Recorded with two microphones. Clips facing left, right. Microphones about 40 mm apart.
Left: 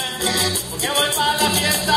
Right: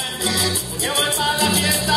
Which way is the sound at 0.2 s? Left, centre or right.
Centre.